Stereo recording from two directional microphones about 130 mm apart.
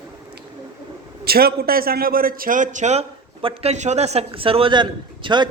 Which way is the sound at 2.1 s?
90° right.